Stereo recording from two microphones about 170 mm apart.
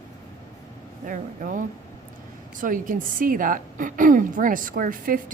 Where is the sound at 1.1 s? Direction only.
50° right (ahead or behind).